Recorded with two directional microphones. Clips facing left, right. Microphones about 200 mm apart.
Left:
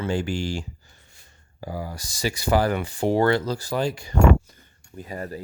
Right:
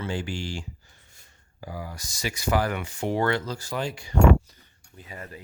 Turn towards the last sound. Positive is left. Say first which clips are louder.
# left 8 dB
turn(degrees=40)  # may be behind; listen again after turning